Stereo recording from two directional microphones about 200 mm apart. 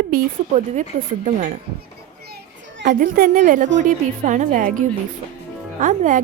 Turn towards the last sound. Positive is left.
turn(degrees=-40)  # may be behind; listen again after turning